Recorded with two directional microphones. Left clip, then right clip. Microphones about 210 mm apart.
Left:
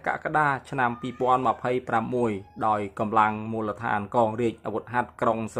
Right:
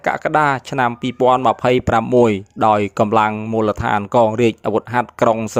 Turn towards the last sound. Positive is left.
turn(degrees=-35)  # may be behind; listen again after turning